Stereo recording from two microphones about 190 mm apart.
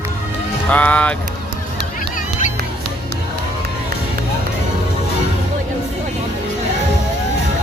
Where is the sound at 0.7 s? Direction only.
5° left (ahead or behind).